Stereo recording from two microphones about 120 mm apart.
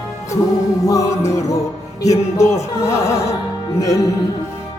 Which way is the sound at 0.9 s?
25° left (ahead or behind).